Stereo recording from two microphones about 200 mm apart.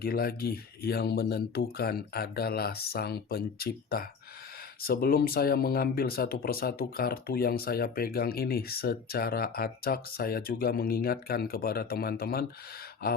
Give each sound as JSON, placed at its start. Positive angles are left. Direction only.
{"t": 0.0, "sound": "speech", "side_deg": 50}